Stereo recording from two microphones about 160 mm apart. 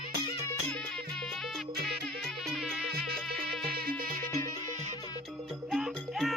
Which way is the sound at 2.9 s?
75° right (ahead or behind).